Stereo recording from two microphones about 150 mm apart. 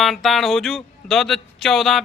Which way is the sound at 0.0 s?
Centre (ahead or behind).